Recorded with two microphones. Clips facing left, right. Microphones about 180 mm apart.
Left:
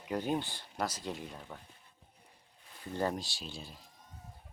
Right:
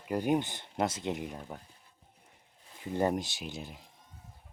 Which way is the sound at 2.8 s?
15° right (ahead or behind).